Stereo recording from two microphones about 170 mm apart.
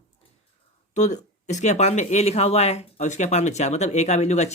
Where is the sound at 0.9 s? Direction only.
45° left (ahead or behind).